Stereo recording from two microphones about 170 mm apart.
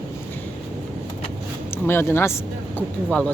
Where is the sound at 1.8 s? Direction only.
15° left (ahead or behind).